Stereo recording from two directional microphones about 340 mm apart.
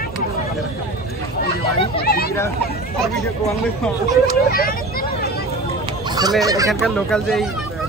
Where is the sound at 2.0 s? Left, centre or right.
Left.